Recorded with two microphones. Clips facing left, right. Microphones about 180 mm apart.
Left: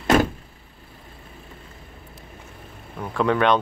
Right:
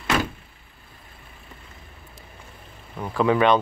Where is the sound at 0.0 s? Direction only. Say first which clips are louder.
Left 6 dB; 40° left (ahead or behind).